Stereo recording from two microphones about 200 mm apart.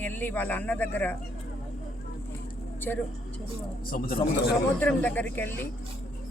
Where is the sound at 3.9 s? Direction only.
50° left (ahead or behind).